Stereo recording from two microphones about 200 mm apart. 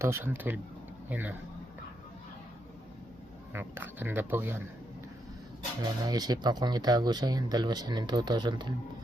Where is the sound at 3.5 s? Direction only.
10° right (ahead or behind).